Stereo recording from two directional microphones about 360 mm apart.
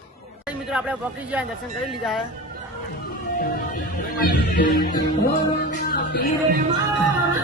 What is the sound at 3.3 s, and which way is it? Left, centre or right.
Music, left.